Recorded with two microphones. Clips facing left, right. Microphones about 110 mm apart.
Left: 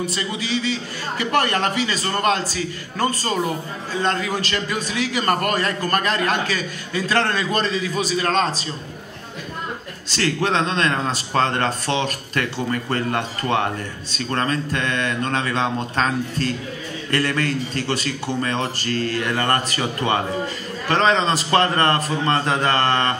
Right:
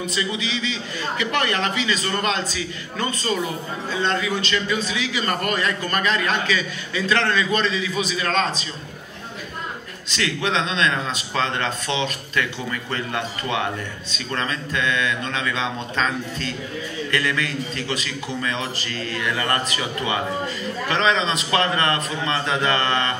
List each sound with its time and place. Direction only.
0.1 s a man's voice: 45° left (ahead or behind)
10.0 s a man's voice: 40° left (ahead or behind)